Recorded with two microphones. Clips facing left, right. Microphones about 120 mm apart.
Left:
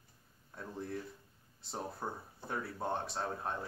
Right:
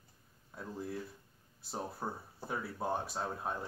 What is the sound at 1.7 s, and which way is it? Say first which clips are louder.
Speech: right 1 dB; 5° right (ahead or behind).